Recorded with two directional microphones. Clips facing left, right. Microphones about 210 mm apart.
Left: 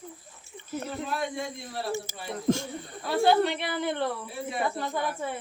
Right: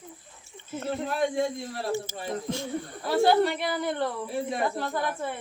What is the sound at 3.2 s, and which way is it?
A woman's voice, centre (ahead or behind).